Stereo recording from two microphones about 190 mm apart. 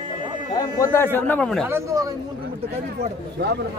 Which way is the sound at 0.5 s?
15° left (ahead or behind).